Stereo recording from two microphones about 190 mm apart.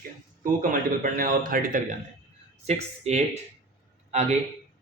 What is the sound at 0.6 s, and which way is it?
A man's voice, 45° right (ahead or behind).